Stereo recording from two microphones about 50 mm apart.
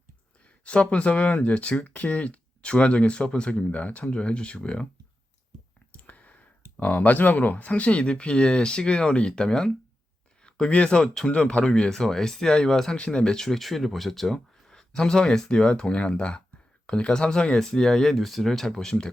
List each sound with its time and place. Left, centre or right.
0.6 s speech: left
6.0 s speech: left; by 11.3 s centre
11.3 s speech: left